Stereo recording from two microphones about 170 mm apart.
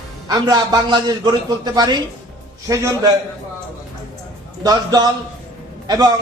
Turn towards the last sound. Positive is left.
turn(degrees=-20)  # may be behind; listen again after turning